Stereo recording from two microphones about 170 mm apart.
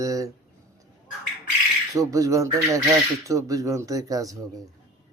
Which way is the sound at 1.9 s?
20° right (ahead or behind).